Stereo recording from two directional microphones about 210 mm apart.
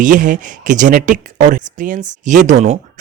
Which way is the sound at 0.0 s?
40° right (ahead or behind).